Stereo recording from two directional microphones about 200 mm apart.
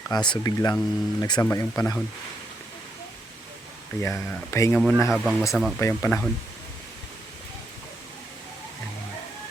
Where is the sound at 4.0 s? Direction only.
10° left (ahead or behind).